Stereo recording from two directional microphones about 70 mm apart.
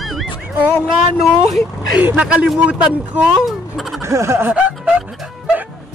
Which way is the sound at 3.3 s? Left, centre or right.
Centre.